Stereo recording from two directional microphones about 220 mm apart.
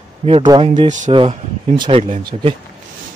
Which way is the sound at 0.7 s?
35° right (ahead or behind).